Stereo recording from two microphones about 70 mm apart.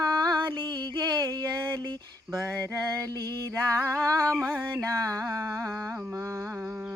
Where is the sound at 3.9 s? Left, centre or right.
Centre.